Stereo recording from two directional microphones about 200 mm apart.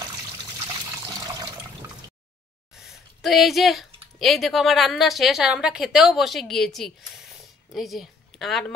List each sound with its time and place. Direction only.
0.7 s water: 20° right (ahead or behind)
2.7 s speech: centre (ahead or behind)